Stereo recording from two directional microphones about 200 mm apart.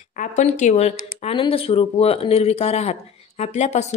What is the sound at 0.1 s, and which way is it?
Speech, 40° left (ahead or behind).